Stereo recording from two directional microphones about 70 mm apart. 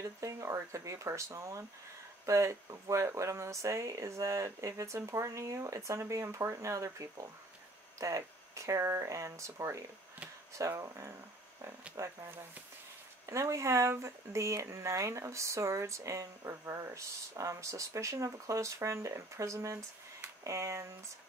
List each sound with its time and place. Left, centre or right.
0.0 s speech: right
13.3 s speech: right